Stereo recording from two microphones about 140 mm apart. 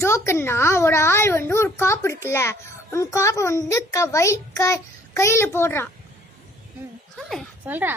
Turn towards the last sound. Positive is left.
turn(degrees=-15)  # may be behind; listen again after turning